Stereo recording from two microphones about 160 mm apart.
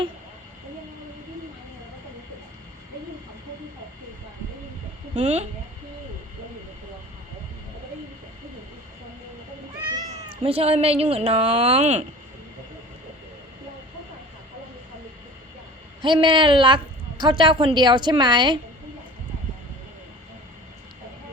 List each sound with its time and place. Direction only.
5.1 s a woman's voice: 45° right (ahead or behind)
9.9 s speech: 35° right (ahead or behind)
16.0 s a woman's voice: 30° right (ahead or behind)